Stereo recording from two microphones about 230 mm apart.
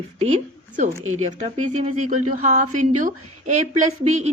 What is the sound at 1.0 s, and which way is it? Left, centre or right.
Speech, right.